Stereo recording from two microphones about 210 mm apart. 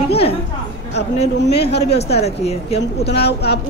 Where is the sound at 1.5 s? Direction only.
50° left (ahead or behind).